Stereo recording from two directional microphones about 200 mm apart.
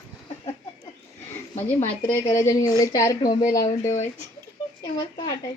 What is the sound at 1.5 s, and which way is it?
A woman's voice, 10° left (ahead or behind).